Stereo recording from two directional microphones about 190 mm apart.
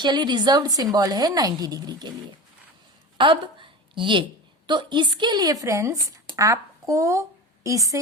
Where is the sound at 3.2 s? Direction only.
25° right (ahead or behind).